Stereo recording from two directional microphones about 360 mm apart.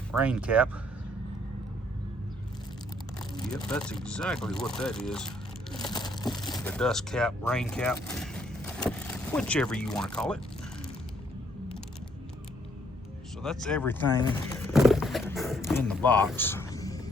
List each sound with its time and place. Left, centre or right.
0.2 s speech: centre
3.3 s speech: centre
5.8 s crushing: centre
6.4 s speech: centre
13.4 s speech: centre
14.5 s a sound: centre